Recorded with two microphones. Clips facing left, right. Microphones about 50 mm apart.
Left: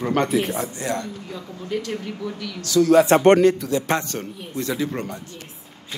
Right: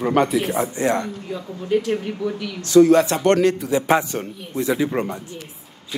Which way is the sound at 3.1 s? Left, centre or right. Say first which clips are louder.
Left 7 dB; left.